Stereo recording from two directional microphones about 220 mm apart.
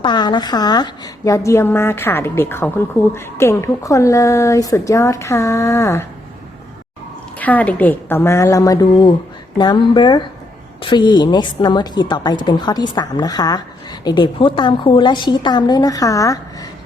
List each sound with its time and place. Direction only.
0.0 s a woman's voice: 20° left (ahead or behind)
7.3 s a woman's voice: 5° left (ahead or behind)